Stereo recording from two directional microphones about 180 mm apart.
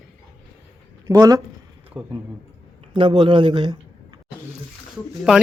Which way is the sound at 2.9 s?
25° right (ahead or behind).